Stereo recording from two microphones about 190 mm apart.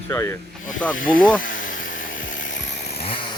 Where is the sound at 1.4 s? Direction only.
45° left (ahead or behind).